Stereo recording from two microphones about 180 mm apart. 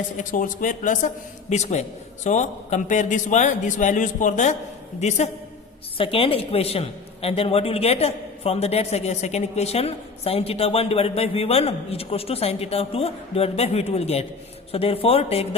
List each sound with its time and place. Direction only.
0.2 s a man's voice: 45° left (ahead or behind)